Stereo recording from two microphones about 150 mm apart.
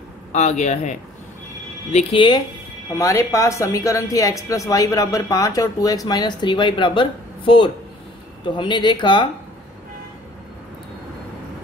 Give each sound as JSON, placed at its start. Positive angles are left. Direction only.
{"t": 0.3, "sound": "speech", "side_deg": 50}
{"t": 2.1, "sound": "speech", "side_deg": 30}
{"t": 2.9, "sound": "speech", "side_deg": 20}